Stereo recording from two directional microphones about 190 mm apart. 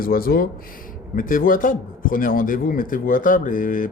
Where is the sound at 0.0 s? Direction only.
50° left (ahead or behind).